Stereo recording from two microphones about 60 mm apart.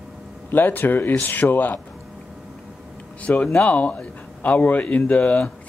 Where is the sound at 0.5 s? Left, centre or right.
Left.